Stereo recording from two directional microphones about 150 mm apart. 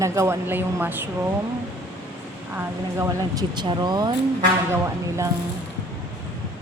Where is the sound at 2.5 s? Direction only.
15° right (ahead or behind).